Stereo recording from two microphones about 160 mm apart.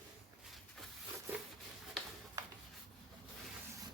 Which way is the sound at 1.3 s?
15° right (ahead or behind).